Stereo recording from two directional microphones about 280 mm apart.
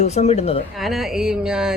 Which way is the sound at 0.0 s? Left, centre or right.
Left.